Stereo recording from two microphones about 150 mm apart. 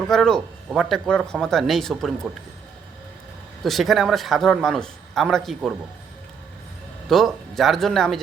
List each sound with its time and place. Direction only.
0.1 s a man's voice: 5° left (ahead or behind)
3.6 s a man's voice: centre (ahead or behind)
7.1 s a man's voice: centre (ahead or behind)